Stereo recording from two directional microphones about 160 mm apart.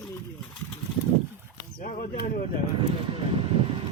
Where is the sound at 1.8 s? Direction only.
60° left (ahead or behind).